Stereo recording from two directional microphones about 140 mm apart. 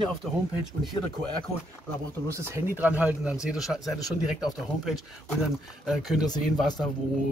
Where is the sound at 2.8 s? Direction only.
10° right (ahead or behind).